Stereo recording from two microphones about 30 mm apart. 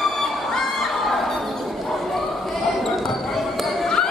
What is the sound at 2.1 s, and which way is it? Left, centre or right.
Basketball bounce, centre.